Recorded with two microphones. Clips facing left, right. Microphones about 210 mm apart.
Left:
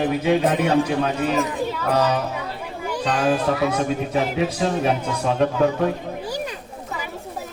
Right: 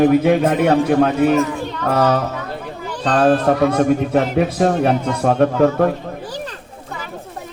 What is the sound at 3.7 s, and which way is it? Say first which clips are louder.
A man's voice: right 7 dB; 55° right (ahead or behind).